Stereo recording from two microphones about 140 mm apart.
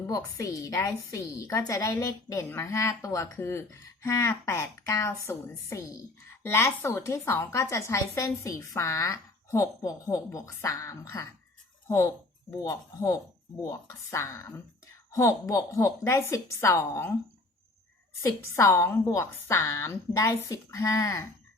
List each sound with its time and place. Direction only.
0.1 s a woman's voice: 25° left (ahead or behind)
18.2 s a woman's voice: 20° left (ahead or behind)